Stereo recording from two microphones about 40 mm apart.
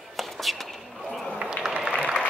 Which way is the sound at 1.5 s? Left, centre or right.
Centre.